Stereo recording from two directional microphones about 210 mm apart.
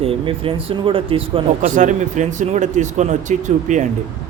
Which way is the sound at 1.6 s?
35° right (ahead or behind).